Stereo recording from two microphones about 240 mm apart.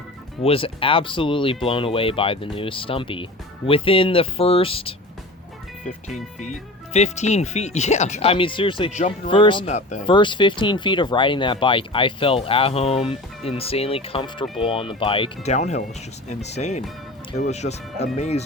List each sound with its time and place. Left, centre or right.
0.4 s speech: left
6.4 s speech: left